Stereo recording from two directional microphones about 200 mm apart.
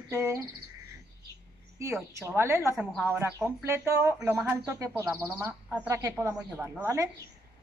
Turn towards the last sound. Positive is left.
turn(degrees=-15)  # may be behind; listen again after turning